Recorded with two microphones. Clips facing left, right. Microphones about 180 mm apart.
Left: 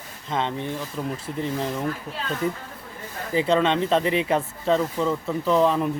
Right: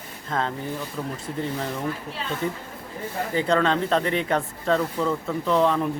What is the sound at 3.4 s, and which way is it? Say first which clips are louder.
Speech: left 2 dB; centre (ahead or behind).